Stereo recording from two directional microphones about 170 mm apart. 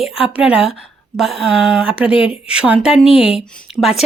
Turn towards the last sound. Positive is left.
turn(degrees=0)  # may be behind; listen again after turning